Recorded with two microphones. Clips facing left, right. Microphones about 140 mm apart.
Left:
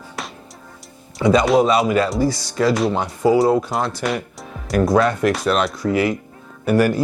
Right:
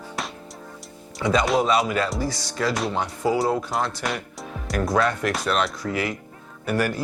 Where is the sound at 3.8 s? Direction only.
5° left (ahead or behind).